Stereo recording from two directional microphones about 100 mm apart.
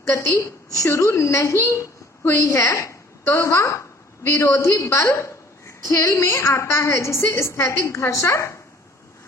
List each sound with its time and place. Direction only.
0.1 s a woman's voice: 25° left (ahead or behind)